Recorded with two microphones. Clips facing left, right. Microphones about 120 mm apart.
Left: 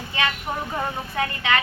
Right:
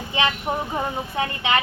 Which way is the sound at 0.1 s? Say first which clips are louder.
Right 3 dB; 20° right (ahead or behind).